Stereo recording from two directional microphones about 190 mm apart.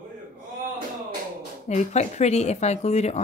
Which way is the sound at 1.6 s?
35° left (ahead or behind).